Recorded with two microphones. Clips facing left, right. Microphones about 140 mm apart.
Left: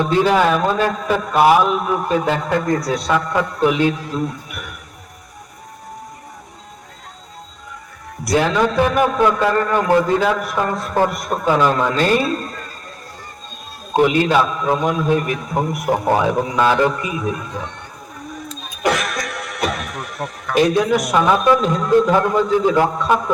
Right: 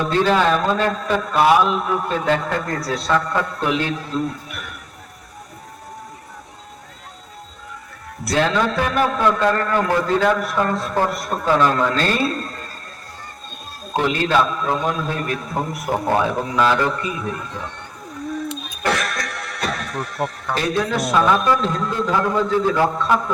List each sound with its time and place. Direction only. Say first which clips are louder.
0.1 s a man's voice: left 1 dB; 15° left (ahead or behind)
8.3 s a man's voice: left 2 dB; 15° left (ahead or behind)
13.9 s a man's voice: left 4 dB; 15° left (ahead or behind)
18.8 s music: left 3 dB; 15° left (ahead or behind)
20.5 s a man's voice: left 8 dB; 15° left (ahead or behind)